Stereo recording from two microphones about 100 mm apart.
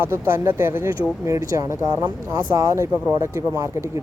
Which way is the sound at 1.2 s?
35° right (ahead or behind).